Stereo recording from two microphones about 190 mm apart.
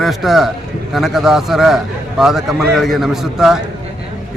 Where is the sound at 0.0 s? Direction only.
Centre (ahead or behind).